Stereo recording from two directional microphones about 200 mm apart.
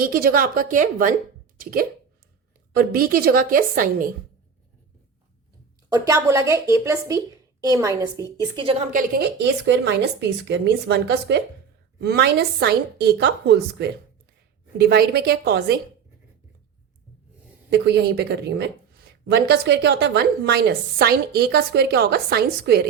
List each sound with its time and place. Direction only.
0.0 s a woman's voice: 45° right (ahead or behind)
5.9 s a woman's voice: 15° right (ahead or behind)
8.9 s a woman's voice: 45° right (ahead or behind)
17.7 s a woman's voice: 55° right (ahead or behind)